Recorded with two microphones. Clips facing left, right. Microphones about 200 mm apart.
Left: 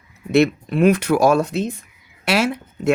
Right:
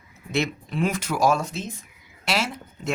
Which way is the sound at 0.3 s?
65° left (ahead or behind).